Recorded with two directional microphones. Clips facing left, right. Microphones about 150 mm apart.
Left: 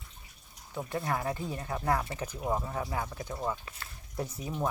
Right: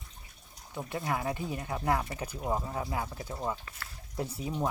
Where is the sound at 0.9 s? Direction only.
10° right (ahead or behind).